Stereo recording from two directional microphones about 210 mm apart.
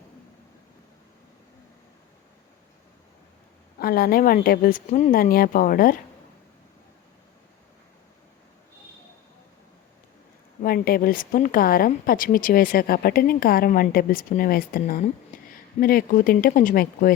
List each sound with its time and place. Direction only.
3.8 s speech: 45° left (ahead or behind)
10.6 s speech: 45° left (ahead or behind)